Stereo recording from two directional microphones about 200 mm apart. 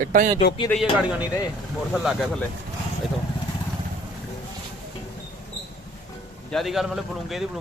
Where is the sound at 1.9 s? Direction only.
Centre (ahead or behind).